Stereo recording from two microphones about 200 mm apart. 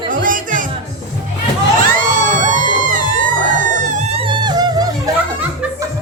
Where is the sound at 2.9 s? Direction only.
40° right (ahead or behind); by 5.1 s 20° right (ahead or behind).